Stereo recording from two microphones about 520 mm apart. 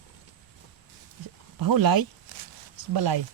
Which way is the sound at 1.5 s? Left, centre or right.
Right.